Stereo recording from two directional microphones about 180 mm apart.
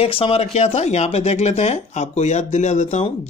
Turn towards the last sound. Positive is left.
turn(degrees=40)  # may be behind; listen again after turning